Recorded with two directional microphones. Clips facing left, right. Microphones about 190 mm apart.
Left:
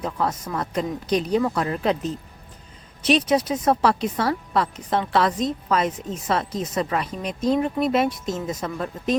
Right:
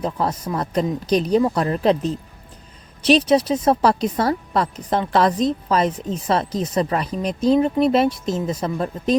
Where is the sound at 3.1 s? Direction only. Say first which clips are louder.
Right 4 dB; 35° right (ahead or behind).